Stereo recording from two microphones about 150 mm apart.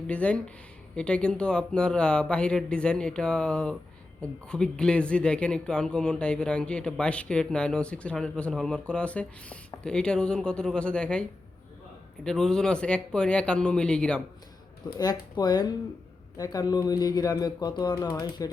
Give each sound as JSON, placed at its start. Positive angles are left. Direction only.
{"t": 0.1, "sound": "speech", "side_deg": 10}
{"t": 14.9, "sound": "speech", "side_deg": 25}